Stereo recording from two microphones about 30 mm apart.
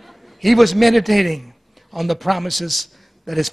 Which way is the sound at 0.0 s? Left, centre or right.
Centre.